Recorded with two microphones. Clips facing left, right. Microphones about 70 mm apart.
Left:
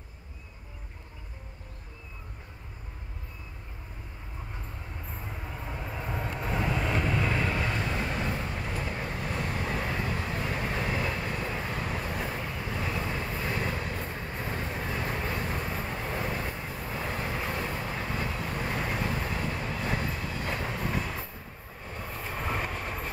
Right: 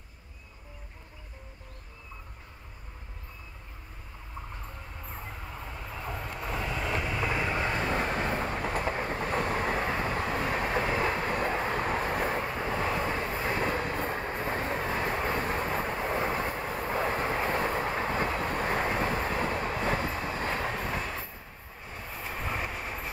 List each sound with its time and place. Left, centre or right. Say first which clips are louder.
5.7 s vehicle: left 3 dB; centre
7.6 s train: right 2 dB; right
16.5 s vehicle: right 5 dB; right
20.9 s train: left 1 dB; centre